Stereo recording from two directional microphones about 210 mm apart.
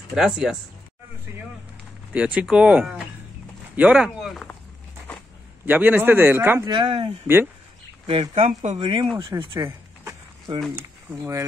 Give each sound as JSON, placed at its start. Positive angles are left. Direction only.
{"t": 0.1, "sound": "speech", "side_deg": -5}
{"t": 2.1, "sound": "speech", "side_deg": -5}
{"t": 3.7, "sound": "a sound", "side_deg": -5}
{"t": 5.7, "sound": "speech", "side_deg": -10}
{"t": 6.7, "sound": "speech", "side_deg": -25}
{"t": 8.1, "sound": "speech", "side_deg": -30}
{"t": 9.1, "sound": "a sound", "side_deg": -20}
{"t": 10.7, "sound": "speech", "side_deg": -10}